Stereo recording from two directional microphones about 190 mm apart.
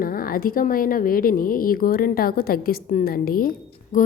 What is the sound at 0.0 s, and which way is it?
A woman's voice, 50° left (ahead or behind).